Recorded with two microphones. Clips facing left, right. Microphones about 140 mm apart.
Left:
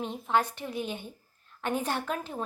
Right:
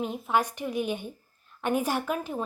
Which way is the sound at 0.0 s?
10° right (ahead or behind).